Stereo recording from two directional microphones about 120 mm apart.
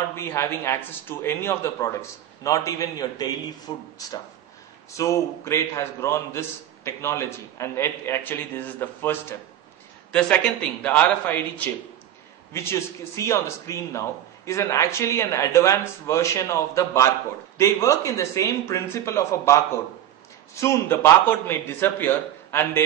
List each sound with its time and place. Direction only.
0.1 s a man's voice: 20° left (ahead or behind)
10.1 s a man's voice: 5° left (ahead or behind)